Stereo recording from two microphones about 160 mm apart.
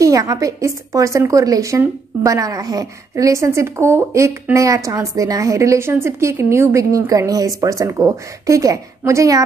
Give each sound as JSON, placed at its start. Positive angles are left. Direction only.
{"t": 0.0, "sound": "a woman's voice", "side_deg": -20}